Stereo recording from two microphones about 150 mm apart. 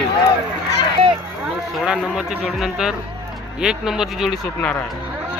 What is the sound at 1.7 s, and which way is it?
Speech, 5° right (ahead or behind).